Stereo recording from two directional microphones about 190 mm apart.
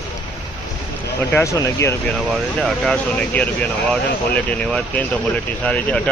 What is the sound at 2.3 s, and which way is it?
Speech, 5° left (ahead or behind).